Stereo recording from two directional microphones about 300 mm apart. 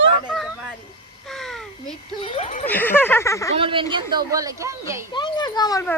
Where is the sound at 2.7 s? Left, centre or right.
Centre.